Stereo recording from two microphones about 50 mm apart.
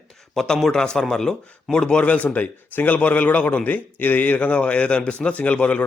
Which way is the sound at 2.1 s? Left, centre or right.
Left.